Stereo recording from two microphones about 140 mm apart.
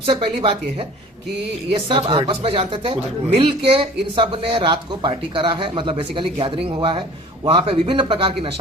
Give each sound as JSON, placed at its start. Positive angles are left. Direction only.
{"t": 0.0, "sound": "speech", "side_deg": -45}
{"t": 1.9, "sound": "speech", "side_deg": -40}